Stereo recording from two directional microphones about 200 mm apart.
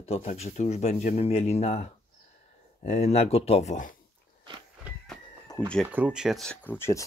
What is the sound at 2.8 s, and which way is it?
Speech, 35° left (ahead or behind).